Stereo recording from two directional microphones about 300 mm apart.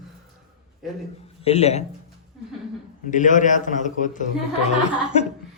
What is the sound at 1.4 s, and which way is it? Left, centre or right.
Speech, left.